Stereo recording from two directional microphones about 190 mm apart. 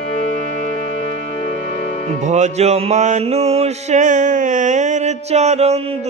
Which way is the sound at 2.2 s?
40° right (ahead or behind).